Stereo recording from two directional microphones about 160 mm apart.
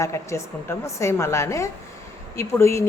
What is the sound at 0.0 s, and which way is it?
A woman's voice, 20° left (ahead or behind).